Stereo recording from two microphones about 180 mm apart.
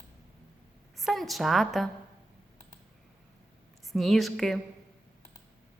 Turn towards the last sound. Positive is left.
turn(degrees=0)  # may be behind; listen again after turning